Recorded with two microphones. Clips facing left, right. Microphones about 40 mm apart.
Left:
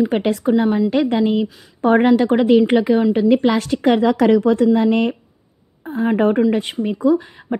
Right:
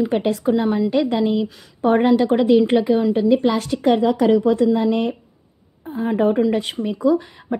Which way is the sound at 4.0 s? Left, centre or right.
Left.